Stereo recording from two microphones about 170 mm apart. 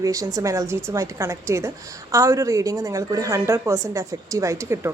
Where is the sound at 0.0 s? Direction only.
20° right (ahead or behind).